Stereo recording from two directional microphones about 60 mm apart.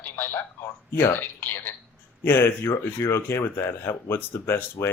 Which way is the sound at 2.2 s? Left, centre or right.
Left.